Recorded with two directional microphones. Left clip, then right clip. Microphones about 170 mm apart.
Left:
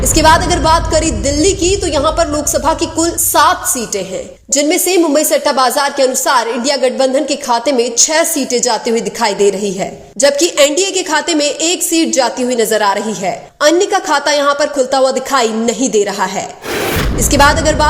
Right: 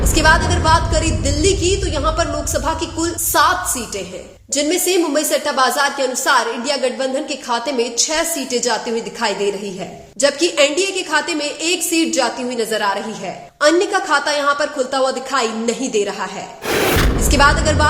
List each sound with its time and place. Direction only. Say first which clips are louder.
0.1 s a woman's voice: left 5 dB; 35° left (ahead or behind)
4.5 s a woman's voice: left 5 dB; 35° left (ahead or behind)
16.7 s gasp: right 1 dB; centre (ahead or behind)
17.2 s a woman's voice: left 5 dB; 35° left (ahead or behind)